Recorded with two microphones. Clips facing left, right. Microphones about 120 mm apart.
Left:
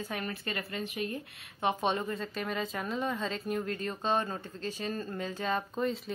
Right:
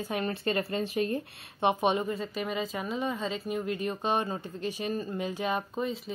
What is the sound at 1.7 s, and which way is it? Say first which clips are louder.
A woman's voice: right 4 dB; 15° right (ahead or behind).